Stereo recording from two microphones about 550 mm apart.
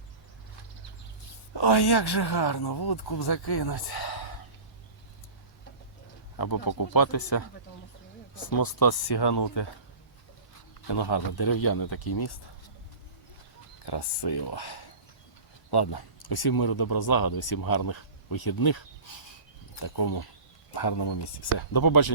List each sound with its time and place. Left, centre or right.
1.5 s speech: left
6.3 s speech: left
8.4 s speech: left
10.8 s speech: left
13.8 s speech: left